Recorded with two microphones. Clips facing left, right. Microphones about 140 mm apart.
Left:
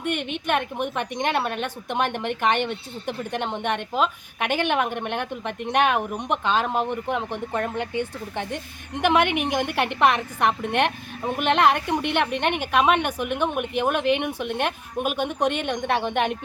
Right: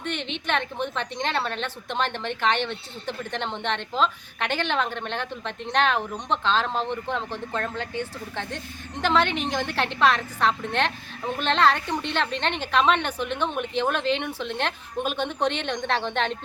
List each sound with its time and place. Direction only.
0.0 s a woman's voice: 10° left (ahead or behind)